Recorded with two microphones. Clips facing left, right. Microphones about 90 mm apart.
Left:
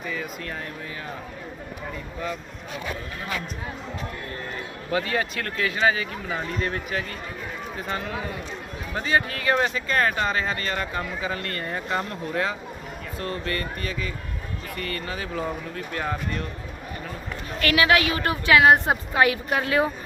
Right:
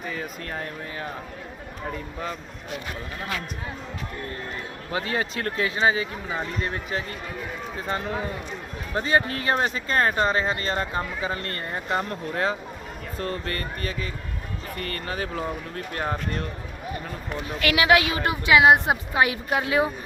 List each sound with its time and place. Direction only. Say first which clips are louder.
0.0 s speech: left 1 dB; 40° right (ahead or behind)
4.9 s a woman's voice: left 2 dB; 25° right (ahead or behind)
7.9 s speech: right 3 dB; 35° right (ahead or behind)
17.3 s a woman's voice: left 1 dB; 15° right (ahead or behind)